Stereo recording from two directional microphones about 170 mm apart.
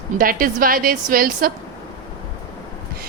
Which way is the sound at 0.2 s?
55° right (ahead or behind).